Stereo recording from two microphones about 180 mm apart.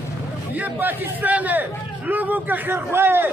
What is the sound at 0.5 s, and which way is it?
A man's voice, 10° right (ahead or behind).